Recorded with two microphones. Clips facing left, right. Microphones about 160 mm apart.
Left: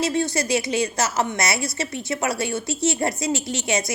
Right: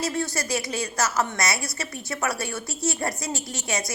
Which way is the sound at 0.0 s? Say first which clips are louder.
Left 5 dB; 20° left (ahead or behind).